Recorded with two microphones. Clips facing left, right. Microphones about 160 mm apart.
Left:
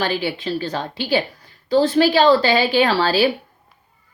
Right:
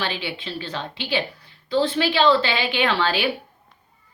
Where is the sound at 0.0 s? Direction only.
40° left (ahead or behind).